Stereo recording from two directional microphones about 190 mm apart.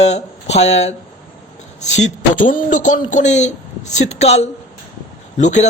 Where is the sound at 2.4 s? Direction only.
40° left (ahead or behind).